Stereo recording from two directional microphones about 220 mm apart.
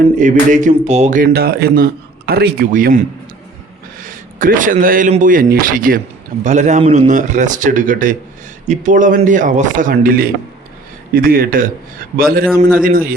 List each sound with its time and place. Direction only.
0.2 s a man's voice: 35° right (ahead or behind)
4.0 s a man's voice: 35° right (ahead or behind)